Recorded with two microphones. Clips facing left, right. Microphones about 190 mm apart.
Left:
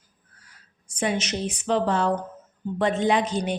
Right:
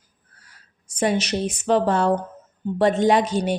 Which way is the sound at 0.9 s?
40° right (ahead or behind).